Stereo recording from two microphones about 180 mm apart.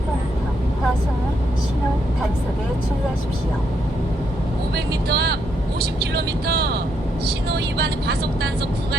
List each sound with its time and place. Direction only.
5.0 s speech: 65° right (ahead or behind)